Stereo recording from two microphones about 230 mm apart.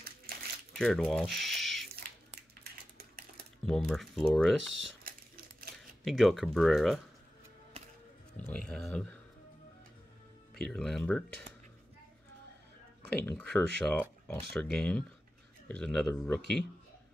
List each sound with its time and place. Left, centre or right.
0.7 s speech: centre
3.6 s speech: centre
5.0 s a sound: right
6.0 s speech: centre
8.4 s speech: centre
10.5 s speech: centre
13.2 s speech: centre